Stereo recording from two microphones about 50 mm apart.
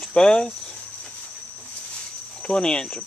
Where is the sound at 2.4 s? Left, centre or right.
Centre.